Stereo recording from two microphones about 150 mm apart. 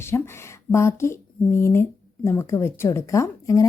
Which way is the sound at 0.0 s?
15° left (ahead or behind).